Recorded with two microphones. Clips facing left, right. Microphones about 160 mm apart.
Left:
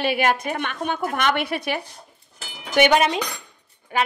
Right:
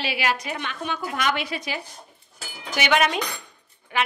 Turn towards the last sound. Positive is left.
turn(degrees=40)  # may be behind; listen again after turning